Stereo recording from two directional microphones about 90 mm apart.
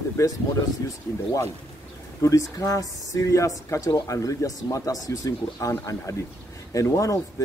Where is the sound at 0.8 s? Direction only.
35° left (ahead or behind).